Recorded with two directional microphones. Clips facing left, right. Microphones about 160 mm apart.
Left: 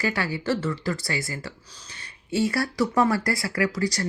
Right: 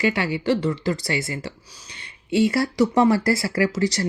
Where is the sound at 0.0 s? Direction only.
25° right (ahead or behind).